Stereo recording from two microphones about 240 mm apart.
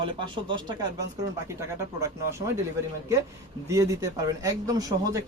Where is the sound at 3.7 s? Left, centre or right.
Centre.